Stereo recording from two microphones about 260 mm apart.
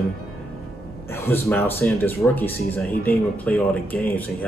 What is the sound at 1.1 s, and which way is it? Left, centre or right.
Speech, centre.